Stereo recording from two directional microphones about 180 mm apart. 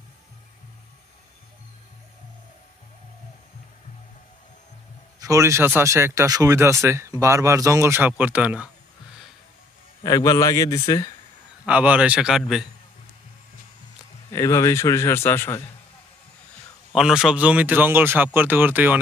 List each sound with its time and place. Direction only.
5.2 s speech: 15° right (ahead or behind)
10.0 s a man's voice: 20° left (ahead or behind)
11.6 s a man's voice: 5° right (ahead or behind)
14.3 s a man's voice: 20° left (ahead or behind)
16.9 s speech: 5° right (ahead or behind)